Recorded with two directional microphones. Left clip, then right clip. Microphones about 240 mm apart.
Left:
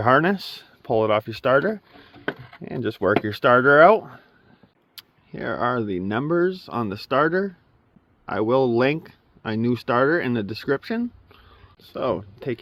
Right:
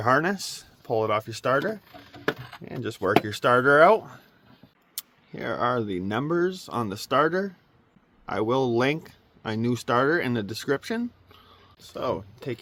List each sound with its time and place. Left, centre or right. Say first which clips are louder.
0.0 s speech: left 4 dB; left; by 11.5 s centre
11.8 s speech: left 4 dB; left